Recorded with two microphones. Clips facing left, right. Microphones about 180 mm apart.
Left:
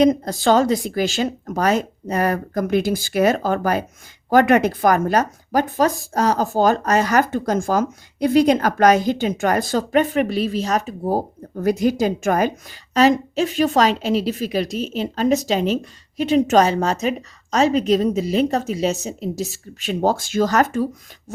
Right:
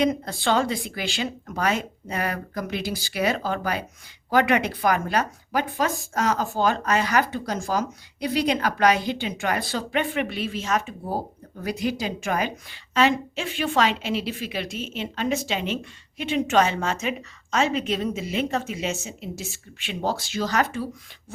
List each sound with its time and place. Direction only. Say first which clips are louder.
0.0 s speech: left 7 dB; 40° left (ahead or behind)